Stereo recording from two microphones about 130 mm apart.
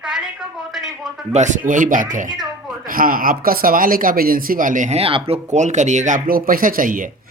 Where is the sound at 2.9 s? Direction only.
90° right.